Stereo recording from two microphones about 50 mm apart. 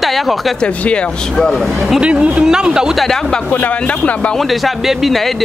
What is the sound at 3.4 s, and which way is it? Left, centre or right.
Speech, left.